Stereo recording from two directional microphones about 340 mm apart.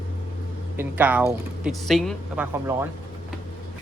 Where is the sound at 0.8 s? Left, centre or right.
Centre.